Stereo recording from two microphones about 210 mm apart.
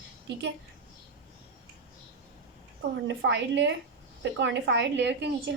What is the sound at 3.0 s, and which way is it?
A woman's voice, 60° right (ahead or behind).